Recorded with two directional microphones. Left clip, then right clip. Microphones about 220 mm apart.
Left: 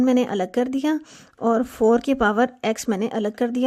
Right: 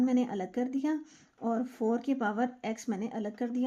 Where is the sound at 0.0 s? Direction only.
50° left (ahead or behind).